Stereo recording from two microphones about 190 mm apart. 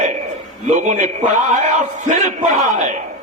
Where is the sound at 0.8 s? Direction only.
40° right (ahead or behind).